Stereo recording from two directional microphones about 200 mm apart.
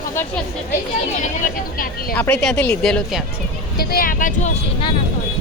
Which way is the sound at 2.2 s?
5° left (ahead or behind).